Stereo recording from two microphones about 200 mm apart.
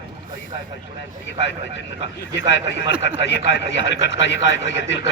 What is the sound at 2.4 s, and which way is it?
A man's voice, 60° left (ahead or behind).